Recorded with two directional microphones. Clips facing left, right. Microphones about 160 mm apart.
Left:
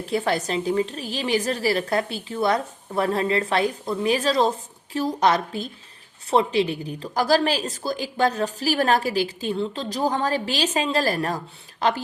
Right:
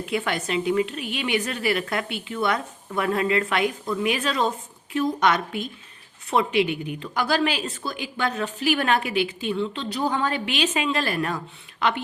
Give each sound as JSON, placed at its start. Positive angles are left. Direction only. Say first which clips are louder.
{"t": 0.0, "sound": "a woman's voice", "louder": "left 3 dB", "side_deg": 35}